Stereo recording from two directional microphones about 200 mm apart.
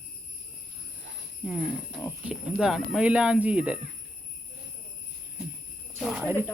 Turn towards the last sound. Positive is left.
turn(degrees=-5)  # may be behind; listen again after turning